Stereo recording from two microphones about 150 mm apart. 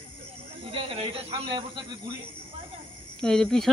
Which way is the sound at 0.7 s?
35° right (ahead or behind).